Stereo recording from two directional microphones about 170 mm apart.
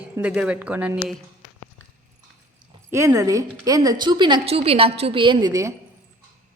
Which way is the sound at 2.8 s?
15° right (ahead or behind).